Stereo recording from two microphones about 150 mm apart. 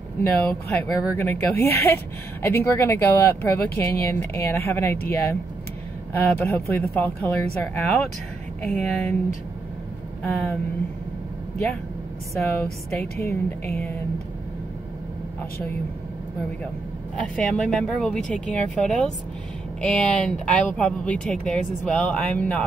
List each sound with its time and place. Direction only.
0.2 s speech: 10° left (ahead or behind)
10.2 s speech: 10° left (ahead or behind)
12.4 s speech: centre (ahead or behind)
12.9 s speech: 15° left (ahead or behind)
17.2 s speech: 5° left (ahead or behind)